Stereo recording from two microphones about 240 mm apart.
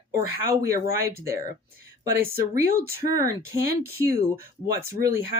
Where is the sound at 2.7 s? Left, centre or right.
Right.